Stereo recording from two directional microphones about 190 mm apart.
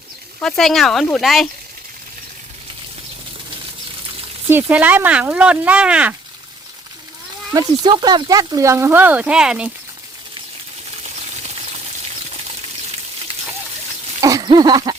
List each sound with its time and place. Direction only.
0.4 s speech: centre (ahead or behind)
4.4 s speech: 10° right (ahead or behind)
7.5 s speech: 20° right (ahead or behind); by 9.7 s 5° right (ahead or behind)
14.2 s a sound: 20° right (ahead or behind)